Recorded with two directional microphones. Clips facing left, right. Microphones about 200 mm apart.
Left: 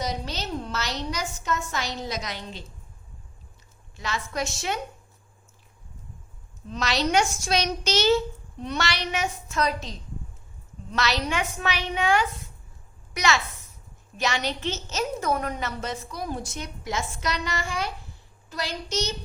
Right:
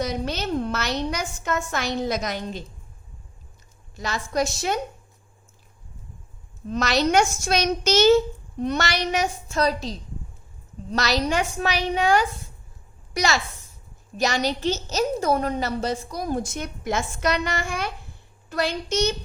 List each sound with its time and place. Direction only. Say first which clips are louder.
0.0 s a woman's voice: right 5 dB; 55° right (ahead or behind)
3.9 s a woman's voice: right 5 dB; 40° right (ahead or behind)
6.7 s a child's voice: right 4 dB; 45° right (ahead or behind)